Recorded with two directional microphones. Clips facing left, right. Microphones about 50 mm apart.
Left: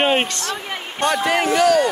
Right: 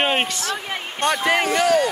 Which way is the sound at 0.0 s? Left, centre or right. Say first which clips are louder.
Left 3 dB; centre.